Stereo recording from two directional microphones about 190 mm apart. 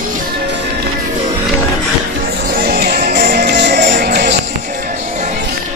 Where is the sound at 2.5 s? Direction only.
55° right (ahead or behind).